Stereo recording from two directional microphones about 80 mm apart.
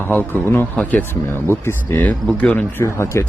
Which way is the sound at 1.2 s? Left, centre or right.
Left.